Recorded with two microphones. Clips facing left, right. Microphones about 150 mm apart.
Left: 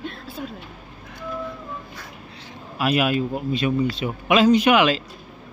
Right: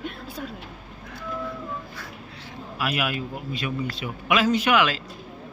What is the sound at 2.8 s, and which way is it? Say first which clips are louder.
A man's voice: left 7 dB; 25° left (ahead or behind).